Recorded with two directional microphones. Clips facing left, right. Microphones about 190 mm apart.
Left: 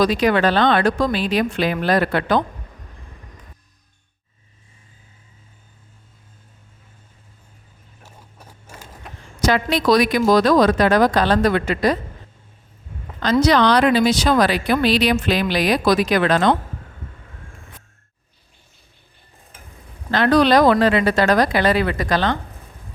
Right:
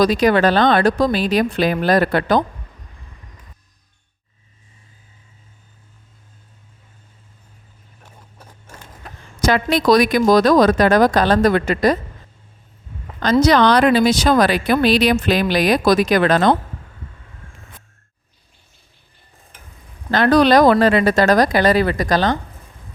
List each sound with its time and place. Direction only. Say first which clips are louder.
0.0 s speech: right 2 dB; 40° right (ahead or behind)
9.4 s speech: right 2 dB; 50° right (ahead or behind)
13.4 s speech: right 2 dB; 45° right (ahead or behind)
20.1 s speech: right 2 dB; 45° right (ahead or behind)